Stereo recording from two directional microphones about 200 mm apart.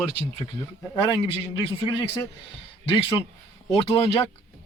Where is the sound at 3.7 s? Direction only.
30° left (ahead or behind).